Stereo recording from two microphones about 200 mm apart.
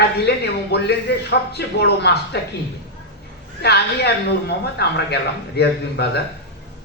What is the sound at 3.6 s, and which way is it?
A man's voice, 55° left (ahead or behind).